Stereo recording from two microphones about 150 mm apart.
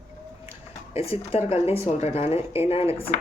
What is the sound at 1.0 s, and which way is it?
Speech, 40° left (ahead or behind).